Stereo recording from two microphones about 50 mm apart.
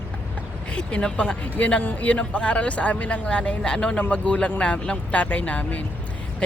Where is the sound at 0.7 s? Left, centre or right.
Left.